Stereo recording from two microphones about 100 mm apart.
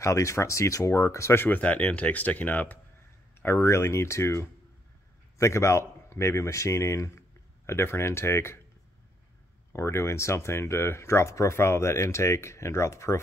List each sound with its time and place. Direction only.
0.0 s speech: 30° left (ahead or behind)
3.4 s speech: 25° left (ahead or behind)
9.7 s speech: 25° left (ahead or behind)